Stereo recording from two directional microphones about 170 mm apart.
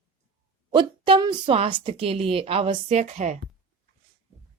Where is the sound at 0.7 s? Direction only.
30° right (ahead or behind).